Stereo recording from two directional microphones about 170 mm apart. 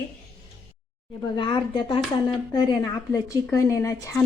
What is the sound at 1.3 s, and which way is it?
A woman's voice, 25° left (ahead or behind).